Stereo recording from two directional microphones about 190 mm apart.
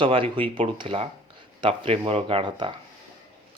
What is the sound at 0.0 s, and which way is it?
Speech, 25° right (ahead or behind).